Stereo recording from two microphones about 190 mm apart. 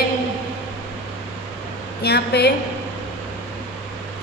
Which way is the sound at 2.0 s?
60° left (ahead or behind).